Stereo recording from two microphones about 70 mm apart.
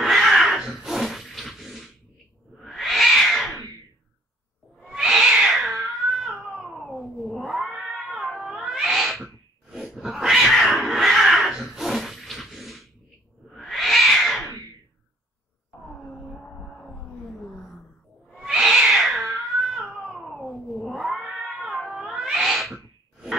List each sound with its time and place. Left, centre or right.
0.0 s a sound: centre
2.5 s cat: centre
4.8 s cat: centre
18.5 s cat: centre